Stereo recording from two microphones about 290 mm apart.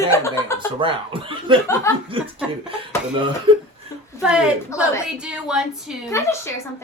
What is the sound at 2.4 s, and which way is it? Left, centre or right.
Speech, centre.